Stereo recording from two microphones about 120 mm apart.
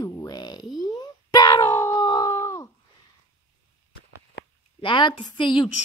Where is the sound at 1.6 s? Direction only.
25° left (ahead or behind).